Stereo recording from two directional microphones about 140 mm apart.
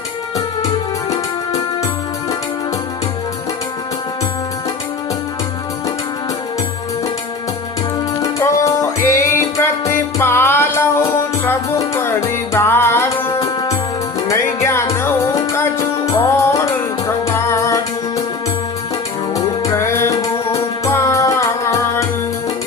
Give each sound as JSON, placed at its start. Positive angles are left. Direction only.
{"t": 8.2, "sound": "music", "side_deg": 20}
{"t": 19.3, "sound": "music", "side_deg": 20}